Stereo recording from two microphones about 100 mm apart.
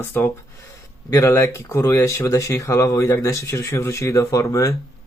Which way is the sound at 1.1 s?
30° left (ahead or behind).